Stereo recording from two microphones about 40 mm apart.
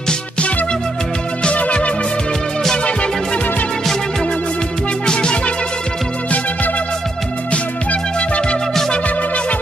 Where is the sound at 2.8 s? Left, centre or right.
Left.